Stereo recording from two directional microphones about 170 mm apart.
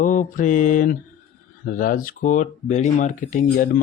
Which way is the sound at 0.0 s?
50° left (ahead or behind).